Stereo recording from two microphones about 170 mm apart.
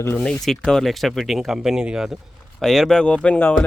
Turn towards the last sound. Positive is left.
turn(degrees=10)  # may be behind; listen again after turning